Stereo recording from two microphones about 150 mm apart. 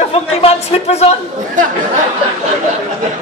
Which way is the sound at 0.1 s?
40° left (ahead or behind).